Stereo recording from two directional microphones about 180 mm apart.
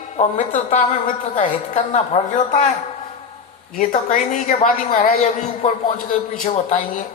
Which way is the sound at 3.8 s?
45° left (ahead or behind).